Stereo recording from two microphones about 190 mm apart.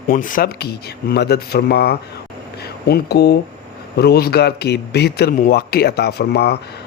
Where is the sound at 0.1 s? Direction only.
45° left (ahead or behind).